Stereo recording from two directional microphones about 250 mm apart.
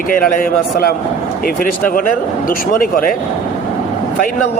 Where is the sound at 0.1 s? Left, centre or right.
Left.